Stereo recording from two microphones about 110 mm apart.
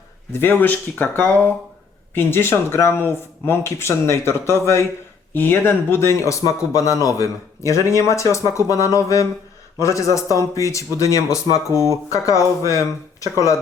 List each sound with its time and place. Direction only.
0.3 s speech: 20° left (ahead or behind)